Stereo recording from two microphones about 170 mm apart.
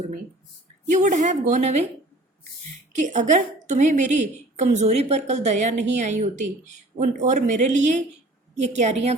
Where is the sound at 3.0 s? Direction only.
45° right (ahead or behind).